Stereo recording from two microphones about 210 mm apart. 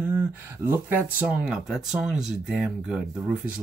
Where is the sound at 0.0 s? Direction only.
10° right (ahead or behind).